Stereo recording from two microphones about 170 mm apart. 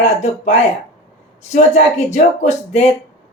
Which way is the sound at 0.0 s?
40° left (ahead or behind).